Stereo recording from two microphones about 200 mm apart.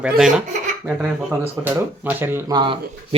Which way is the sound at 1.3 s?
10° right (ahead or behind).